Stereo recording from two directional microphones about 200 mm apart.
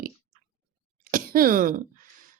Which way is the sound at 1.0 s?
45° right (ahead or behind).